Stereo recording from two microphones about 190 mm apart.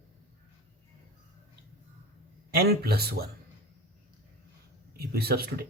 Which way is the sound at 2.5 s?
55° right (ahead or behind).